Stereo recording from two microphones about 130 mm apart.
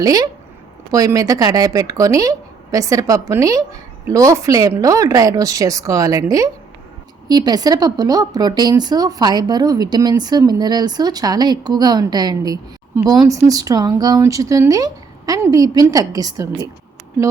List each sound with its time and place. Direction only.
0.0 s speech: 30° right (ahead or behind)